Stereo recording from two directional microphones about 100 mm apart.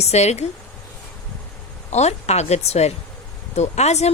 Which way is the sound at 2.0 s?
90° left.